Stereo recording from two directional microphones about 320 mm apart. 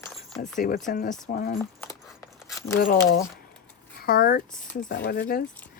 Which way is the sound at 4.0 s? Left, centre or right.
Left.